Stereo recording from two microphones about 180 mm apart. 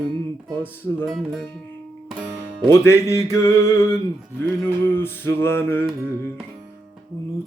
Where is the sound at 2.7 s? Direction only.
15° left (ahead or behind).